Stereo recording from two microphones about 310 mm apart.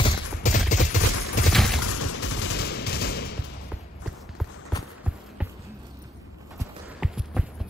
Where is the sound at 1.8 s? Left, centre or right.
Left.